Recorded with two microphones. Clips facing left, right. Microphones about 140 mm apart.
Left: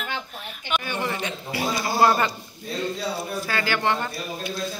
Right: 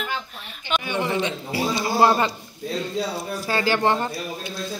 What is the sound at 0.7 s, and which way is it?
A woman's voice, 20° right (ahead or behind).